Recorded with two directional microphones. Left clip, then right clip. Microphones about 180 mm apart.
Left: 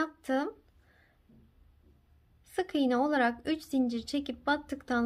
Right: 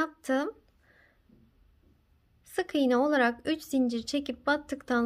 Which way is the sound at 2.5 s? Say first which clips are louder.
Right 3 dB; 20° right (ahead or behind).